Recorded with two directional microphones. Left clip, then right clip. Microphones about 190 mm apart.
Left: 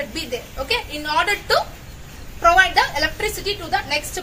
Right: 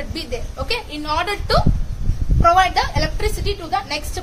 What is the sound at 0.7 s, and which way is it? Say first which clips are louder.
A woman's voice: left 1 dB; 40° right (ahead or behind).